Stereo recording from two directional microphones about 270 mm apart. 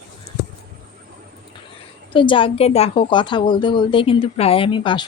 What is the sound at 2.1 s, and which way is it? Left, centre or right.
A woman's voice, centre.